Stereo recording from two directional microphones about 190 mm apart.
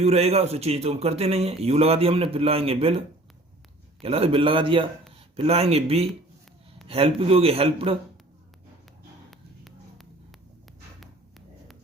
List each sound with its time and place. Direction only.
0.0 s a man's voice: 35° right (ahead or behind)
4.0 s a man's voice: 30° right (ahead or behind)
9.3 s a sound: centre (ahead or behind)